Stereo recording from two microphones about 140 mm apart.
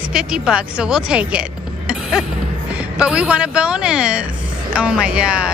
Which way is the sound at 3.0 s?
5° right (ahead or behind).